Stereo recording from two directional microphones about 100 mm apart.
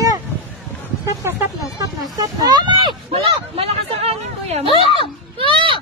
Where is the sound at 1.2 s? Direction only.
25° right (ahead or behind).